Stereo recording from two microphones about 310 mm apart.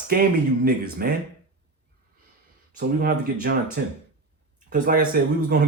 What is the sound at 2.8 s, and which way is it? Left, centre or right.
Speech, right.